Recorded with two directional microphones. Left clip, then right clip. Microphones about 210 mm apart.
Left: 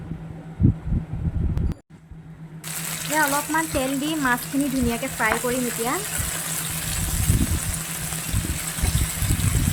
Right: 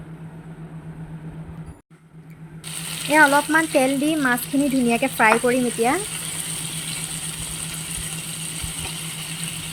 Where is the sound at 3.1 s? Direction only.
20° right (ahead or behind).